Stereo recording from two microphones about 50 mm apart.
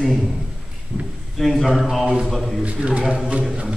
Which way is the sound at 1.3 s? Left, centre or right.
Centre.